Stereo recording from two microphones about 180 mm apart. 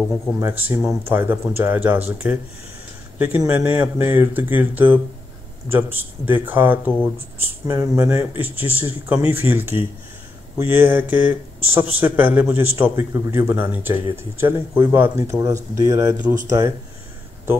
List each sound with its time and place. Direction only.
0.4 s speech: 10° right (ahead or behind)